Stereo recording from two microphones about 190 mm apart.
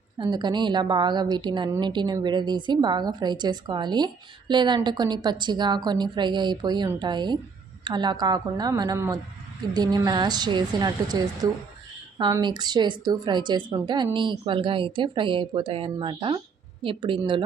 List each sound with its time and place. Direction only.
0.2 s a woman's voice: 20° right (ahead or behind)